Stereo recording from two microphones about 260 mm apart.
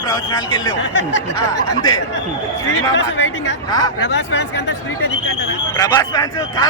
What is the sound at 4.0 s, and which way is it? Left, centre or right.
Speech, left.